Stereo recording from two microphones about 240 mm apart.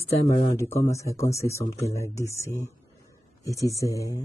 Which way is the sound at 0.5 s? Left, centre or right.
Centre.